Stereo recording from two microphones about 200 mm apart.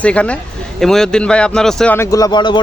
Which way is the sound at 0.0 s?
5° left (ahead or behind).